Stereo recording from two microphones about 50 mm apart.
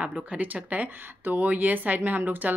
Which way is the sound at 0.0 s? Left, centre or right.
Right.